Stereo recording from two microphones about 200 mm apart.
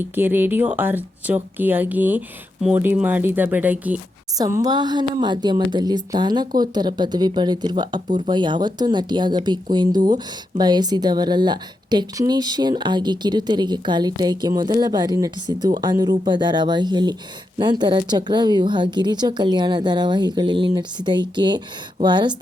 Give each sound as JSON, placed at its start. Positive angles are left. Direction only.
{"t": 0.2, "sound": "speech", "side_deg": -10}